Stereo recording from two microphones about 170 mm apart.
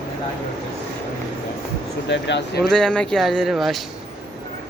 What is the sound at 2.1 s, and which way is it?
Speech, 90° left.